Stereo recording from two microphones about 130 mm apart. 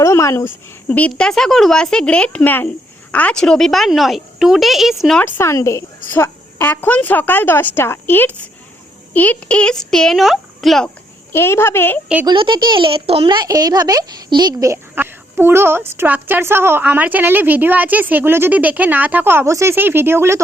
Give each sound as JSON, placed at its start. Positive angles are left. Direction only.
{"t": 0.0, "sound": "a sound", "side_deg": 20}
{"t": 0.9, "sound": "a woman's voice", "side_deg": 10}
{"t": 5.2, "sound": "a woman's voice", "side_deg": 20}
{"t": 10.8, "sound": "speech", "side_deg": 15}
{"t": 12.2, "sound": "speech", "side_deg": -40}
{"t": 14.7, "sound": "a woman's voice", "side_deg": -15}